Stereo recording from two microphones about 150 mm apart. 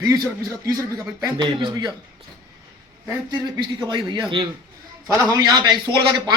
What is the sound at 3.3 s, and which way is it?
Speech, 30° right (ahead or behind).